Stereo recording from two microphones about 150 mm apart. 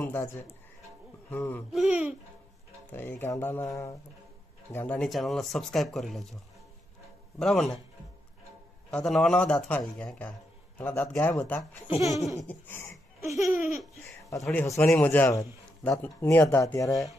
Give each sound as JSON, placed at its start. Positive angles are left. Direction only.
{"t": 0.0, "sound": "speech", "side_deg": 15}
{"t": 1.7, "sound": "speech", "side_deg": -5}
{"t": 2.9, "sound": "speech", "side_deg": 15}
{"t": 4.7, "sound": "speech", "side_deg": 10}
{"t": 8.9, "sound": "speech", "side_deg": 5}
{"t": 12.9, "sound": "laughter", "side_deg": 0}
{"t": 14.4, "sound": "speech", "side_deg": 10}